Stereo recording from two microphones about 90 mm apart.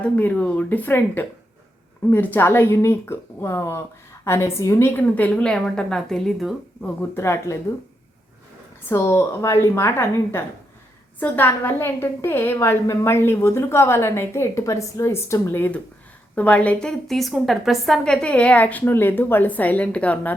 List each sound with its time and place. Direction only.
0.2 s a woman's voice: 15° left (ahead or behind); by 4.9 s 30° left (ahead or behind)
4.9 s a woman's voice: 20° left (ahead or behind)
6.8 s a woman's voice: 20° left (ahead or behind)
8.9 s a woman's voice: 30° left (ahead or behind)
17.1 s a woman's voice: centre (ahead or behind)